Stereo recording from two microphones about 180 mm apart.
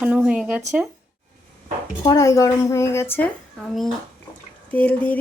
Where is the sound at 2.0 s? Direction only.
20° left (ahead or behind).